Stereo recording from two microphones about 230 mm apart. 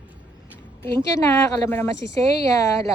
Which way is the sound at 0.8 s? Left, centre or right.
Centre.